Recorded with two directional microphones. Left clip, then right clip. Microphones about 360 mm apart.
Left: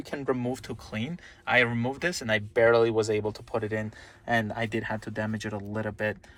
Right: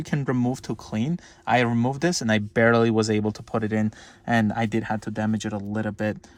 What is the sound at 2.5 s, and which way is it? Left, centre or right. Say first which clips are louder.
Speech: right 1 dB; right.